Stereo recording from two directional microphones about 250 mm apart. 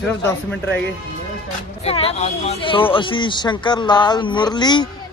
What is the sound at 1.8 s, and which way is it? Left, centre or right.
Speech, left.